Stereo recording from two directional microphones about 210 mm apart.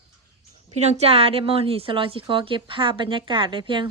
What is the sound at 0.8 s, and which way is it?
A woman's voice, 30° right (ahead or behind).